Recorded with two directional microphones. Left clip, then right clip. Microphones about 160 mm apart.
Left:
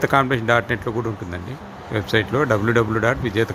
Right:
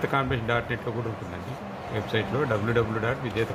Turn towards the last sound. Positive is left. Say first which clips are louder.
# left 8 dB
turn(degrees=80)